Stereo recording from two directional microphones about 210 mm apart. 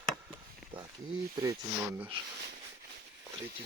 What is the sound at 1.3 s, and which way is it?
Speech, 15° right (ahead or behind).